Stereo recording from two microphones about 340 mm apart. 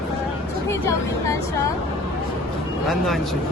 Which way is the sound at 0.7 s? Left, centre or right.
Centre.